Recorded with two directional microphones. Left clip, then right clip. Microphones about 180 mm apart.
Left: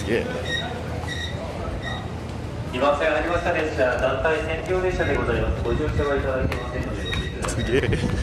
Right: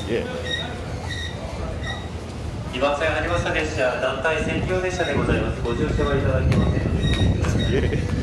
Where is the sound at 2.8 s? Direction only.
35° left (ahead or behind).